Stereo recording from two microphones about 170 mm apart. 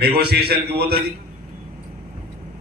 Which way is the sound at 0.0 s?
70° right (ahead or behind).